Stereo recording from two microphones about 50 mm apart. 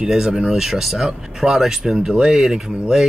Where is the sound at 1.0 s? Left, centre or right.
Centre.